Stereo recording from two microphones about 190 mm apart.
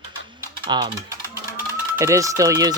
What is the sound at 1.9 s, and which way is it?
Speech, 15° right (ahead or behind).